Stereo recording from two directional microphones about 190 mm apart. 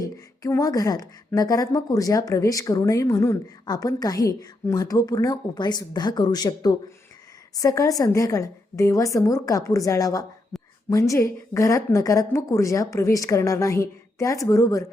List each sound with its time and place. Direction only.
0.0 s a woman's voice: 20° left (ahead or behind)